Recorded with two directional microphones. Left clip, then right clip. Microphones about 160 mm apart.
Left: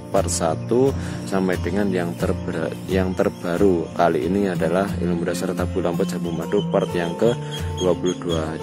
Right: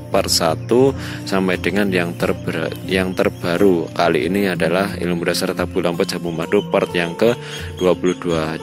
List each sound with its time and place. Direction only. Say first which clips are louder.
0.1 s speech: right 4 dB; 15° right (ahead or behind)
1.5 s speech: right 4 dB; 30° right (ahead or behind)
7.8 s speech: right 4 dB; 30° right (ahead or behind)
8.3 s speech: right 4 dB; 15° right (ahead or behind)